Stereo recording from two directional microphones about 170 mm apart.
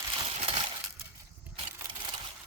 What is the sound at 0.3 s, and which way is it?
Crushing, 35° right (ahead or behind).